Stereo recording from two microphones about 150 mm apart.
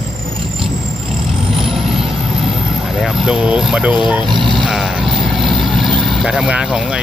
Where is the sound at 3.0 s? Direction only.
5° right (ahead or behind).